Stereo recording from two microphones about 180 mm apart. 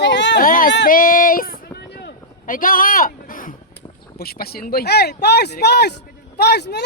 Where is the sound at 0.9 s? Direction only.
50° left (ahead or behind).